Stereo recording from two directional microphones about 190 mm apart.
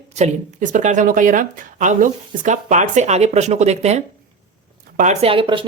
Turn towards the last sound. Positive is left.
turn(degrees=-25)  # may be behind; listen again after turning